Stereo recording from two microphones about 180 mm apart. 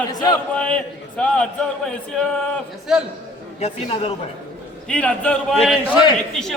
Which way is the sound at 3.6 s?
35° left (ahead or behind).